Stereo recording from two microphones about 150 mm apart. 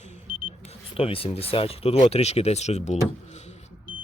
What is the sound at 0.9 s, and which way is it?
Speech, 40° left (ahead or behind).